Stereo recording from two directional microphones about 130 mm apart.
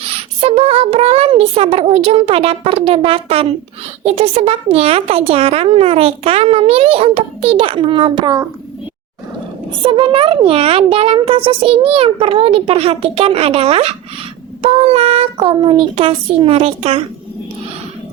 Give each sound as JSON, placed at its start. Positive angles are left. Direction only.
{"t": 0.0, "sound": "a child's voice", "side_deg": -50}
{"t": 9.8, "sound": "a child's voice", "side_deg": -40}